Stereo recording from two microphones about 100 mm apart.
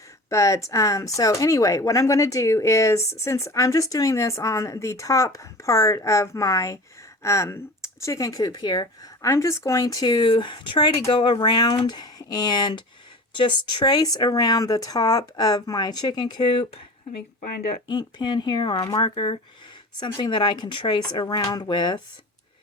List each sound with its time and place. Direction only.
0.3 s speech: 30° left (ahead or behind)
9.2 s speech: 30° left (ahead or behind)
10.2 s speech: 55° left (ahead or behind)
17.8 s speech: 50° left (ahead or behind); by 19.4 s 65° left (ahead or behind)
20.0 s speech: 50° left (ahead or behind)